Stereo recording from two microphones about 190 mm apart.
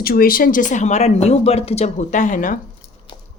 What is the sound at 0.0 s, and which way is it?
Speech, 50° left (ahead or behind).